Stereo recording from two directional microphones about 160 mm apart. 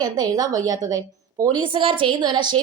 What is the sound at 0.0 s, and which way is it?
A woman's voice, 25° right (ahead or behind).